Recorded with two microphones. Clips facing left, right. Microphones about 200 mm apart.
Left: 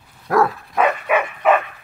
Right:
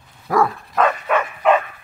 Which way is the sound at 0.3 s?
Centre (ahead or behind).